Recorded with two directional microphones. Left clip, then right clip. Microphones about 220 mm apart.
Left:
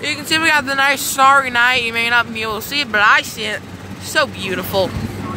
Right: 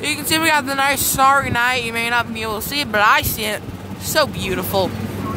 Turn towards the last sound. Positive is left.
turn(degrees=-10)  # may be behind; listen again after turning